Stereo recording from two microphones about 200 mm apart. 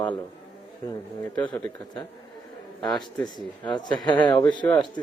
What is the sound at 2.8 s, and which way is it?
A man's voice, 20° left (ahead or behind).